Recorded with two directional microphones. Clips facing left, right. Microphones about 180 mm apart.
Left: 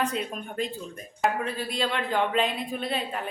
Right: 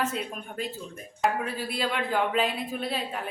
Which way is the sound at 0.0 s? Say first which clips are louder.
Left 2 dB; centre (ahead or behind).